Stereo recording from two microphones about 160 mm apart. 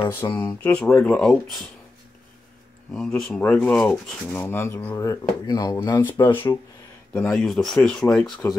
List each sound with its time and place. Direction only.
0.1 s speech: 15° left (ahead or behind)
2.9 s speech: 5° left (ahead or behind); by 6.3 s 30° left (ahead or behind)
7.2 s speech: 5° left (ahead or behind)